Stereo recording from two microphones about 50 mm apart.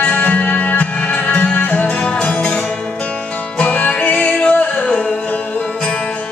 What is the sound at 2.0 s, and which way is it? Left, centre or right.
Music, centre.